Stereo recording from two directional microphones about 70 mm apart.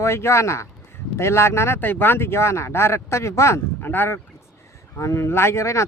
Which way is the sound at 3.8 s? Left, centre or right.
Left.